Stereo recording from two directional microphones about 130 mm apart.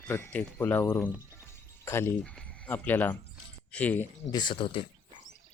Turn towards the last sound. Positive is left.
turn(degrees=40)  # may be behind; listen again after turning